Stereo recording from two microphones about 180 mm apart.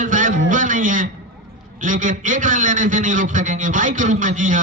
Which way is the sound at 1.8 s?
45° right (ahead or behind).